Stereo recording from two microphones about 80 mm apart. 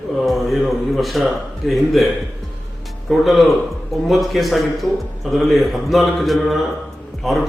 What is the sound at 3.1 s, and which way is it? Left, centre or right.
A man's voice, centre.